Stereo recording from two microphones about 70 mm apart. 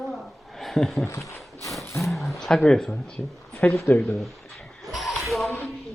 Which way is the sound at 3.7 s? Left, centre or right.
Left.